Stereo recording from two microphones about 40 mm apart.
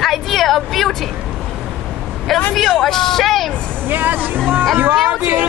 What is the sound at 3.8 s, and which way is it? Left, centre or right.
Speech, right.